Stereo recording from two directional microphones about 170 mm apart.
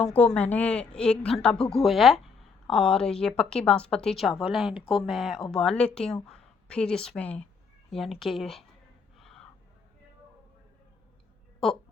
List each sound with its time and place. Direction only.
0.3 s speech: 10° left (ahead or behind)
4.7 s speech: 30° left (ahead or behind)
5.0 s speech: centre (ahead or behind)
9.1 s gasp: centre (ahead or behind)